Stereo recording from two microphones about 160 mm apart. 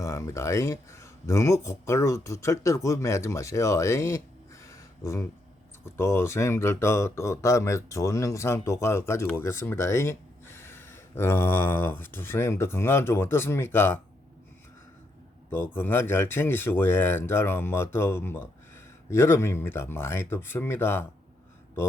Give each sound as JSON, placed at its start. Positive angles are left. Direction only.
{"t": 0.0, "sound": "speech", "side_deg": 20}
{"t": 4.6, "sound": "a sound", "side_deg": 20}
{"t": 5.8, "sound": "speech", "side_deg": 15}
{"t": 15.7, "sound": "speech", "side_deg": 15}